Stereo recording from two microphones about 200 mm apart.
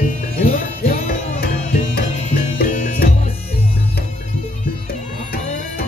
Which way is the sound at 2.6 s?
45° left (ahead or behind).